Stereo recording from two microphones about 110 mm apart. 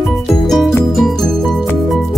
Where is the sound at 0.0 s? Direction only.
Centre (ahead or behind).